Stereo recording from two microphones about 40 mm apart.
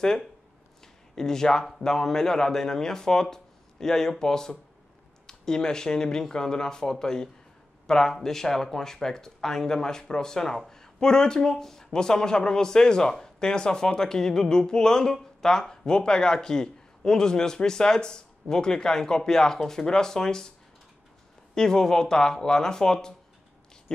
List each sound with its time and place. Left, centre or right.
1.1 s a man's voice: centre
21.5 s a man's voice: centre